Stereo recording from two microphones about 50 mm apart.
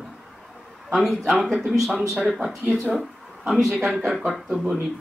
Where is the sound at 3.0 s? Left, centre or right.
Centre.